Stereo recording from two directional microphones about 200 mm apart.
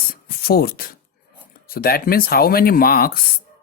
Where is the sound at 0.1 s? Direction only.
50° left (ahead or behind).